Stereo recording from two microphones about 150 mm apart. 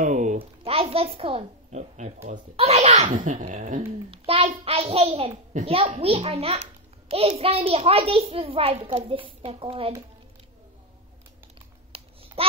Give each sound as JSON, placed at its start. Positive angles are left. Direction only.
{"t": 0.0, "sound": "a sound", "side_deg": -55}
{"t": 0.7, "sound": "a child's voice", "side_deg": -40}
{"t": 3.2, "sound": "speech", "side_deg": -60}
{"t": 3.8, "sound": "a child's voice", "side_deg": -40}
{"t": 5.5, "sound": "a child's voice", "side_deg": -50}
{"t": 5.8, "sound": "a child's voice", "side_deg": -40}
{"t": 12.4, "sound": "babbling", "side_deg": -40}